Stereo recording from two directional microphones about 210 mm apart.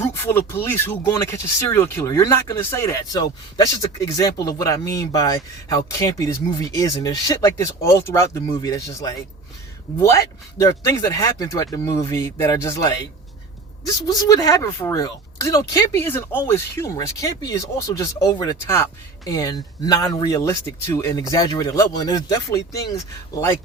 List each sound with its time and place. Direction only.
0.0 s speech: 10° left (ahead or behind)